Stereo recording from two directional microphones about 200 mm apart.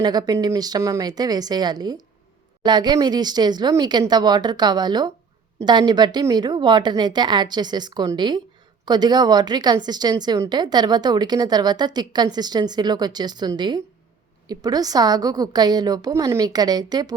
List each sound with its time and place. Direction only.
0.0 s a woman's voice: 20° right (ahead or behind)